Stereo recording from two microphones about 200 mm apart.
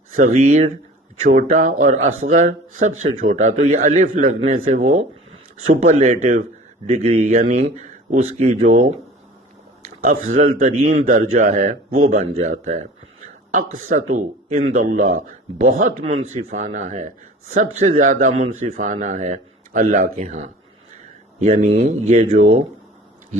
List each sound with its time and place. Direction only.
0.2 s a man's voice: 35° right (ahead or behind)